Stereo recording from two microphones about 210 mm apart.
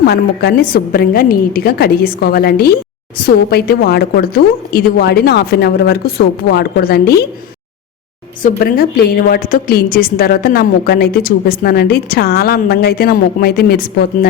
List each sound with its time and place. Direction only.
0.0 s a woman's voice: 50° left (ahead or behind)
8.4 s a woman's voice: 40° left (ahead or behind)